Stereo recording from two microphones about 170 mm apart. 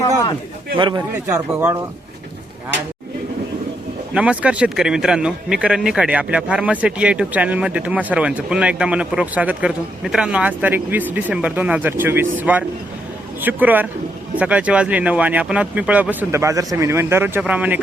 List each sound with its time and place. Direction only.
0.8 s a man's voice: 25° right (ahead or behind)
4.1 s a man's voice: 5° right (ahead or behind)